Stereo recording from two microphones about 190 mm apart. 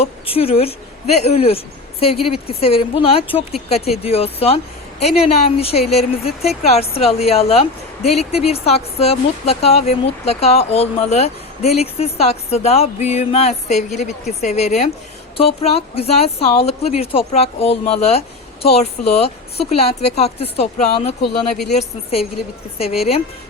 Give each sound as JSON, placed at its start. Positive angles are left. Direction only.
{"t": 0.0, "sound": "a woman's voice", "side_deg": 30}